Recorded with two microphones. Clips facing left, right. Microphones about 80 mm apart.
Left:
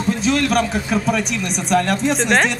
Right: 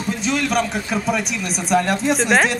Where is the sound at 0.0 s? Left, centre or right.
Centre.